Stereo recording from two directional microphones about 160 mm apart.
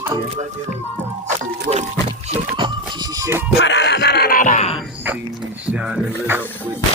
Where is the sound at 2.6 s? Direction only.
25° right (ahead or behind).